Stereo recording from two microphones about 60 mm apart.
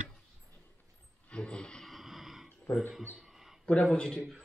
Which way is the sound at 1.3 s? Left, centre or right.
Centre.